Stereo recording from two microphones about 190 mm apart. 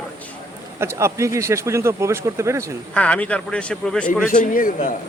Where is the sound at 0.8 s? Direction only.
15° right (ahead or behind).